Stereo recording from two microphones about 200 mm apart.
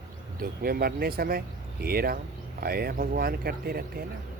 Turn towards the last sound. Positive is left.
turn(degrees=-50)  # may be behind; listen again after turning